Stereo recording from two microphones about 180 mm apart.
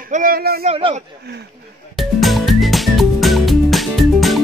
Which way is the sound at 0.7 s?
30° right (ahead or behind).